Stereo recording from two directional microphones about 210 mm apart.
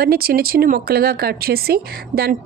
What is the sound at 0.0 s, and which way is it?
A woman's voice, 45° right (ahead or behind).